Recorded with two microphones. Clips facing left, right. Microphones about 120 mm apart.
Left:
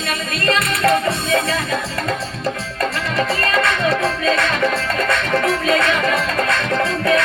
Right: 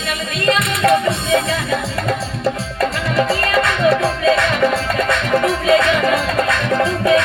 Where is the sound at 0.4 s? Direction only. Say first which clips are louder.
Right 2 dB; 20° right (ahead or behind).